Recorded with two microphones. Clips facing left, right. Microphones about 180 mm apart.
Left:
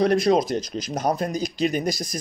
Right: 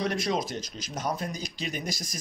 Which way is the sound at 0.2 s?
60° left (ahead or behind).